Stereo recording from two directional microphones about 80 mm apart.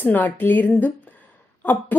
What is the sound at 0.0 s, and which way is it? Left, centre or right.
Speech, left.